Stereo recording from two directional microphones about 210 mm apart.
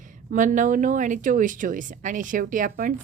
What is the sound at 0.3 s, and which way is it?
Speech, 35° right (ahead or behind).